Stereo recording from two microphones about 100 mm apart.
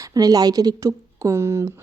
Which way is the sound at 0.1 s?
40° right (ahead or behind).